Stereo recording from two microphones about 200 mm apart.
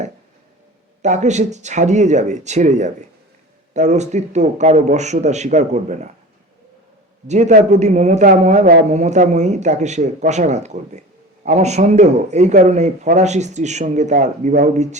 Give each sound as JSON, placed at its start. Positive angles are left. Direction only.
{"t": 1.0, "sound": "speech", "side_deg": -35}
{"t": 7.3, "sound": "speech", "side_deg": -35}